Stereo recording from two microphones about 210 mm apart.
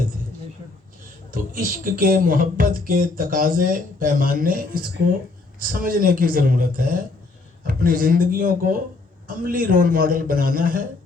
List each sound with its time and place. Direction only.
1.3 s a man's voice: 40° right (ahead or behind)